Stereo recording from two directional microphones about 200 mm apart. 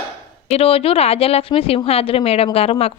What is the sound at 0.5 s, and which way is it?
Speech, 30° left (ahead or behind).